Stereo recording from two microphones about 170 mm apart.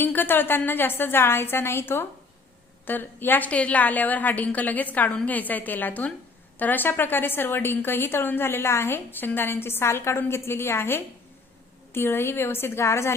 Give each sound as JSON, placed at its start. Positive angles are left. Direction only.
{"t": 0.0, "sound": "a woman's voice", "side_deg": 10}